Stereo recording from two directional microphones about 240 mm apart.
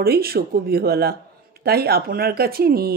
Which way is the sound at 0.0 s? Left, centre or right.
Right.